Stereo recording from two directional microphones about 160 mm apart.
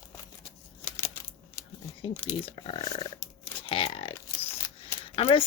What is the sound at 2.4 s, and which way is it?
Speech, 30° left (ahead or behind).